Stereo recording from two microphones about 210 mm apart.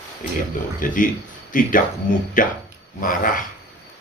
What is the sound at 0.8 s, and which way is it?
Speech, 40° left (ahead or behind).